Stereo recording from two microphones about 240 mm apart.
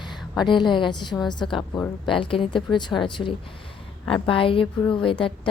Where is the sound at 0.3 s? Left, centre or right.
Centre.